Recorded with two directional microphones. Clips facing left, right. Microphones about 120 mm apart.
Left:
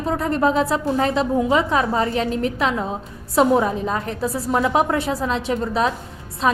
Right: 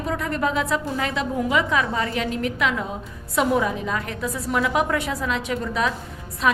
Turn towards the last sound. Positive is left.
turn(degrees=30)  # may be behind; listen again after turning